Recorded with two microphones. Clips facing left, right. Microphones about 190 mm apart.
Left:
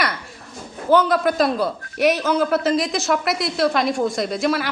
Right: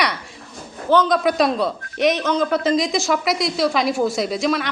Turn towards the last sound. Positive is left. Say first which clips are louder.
# even
turn(degrees=5)  # may be behind; listen again after turning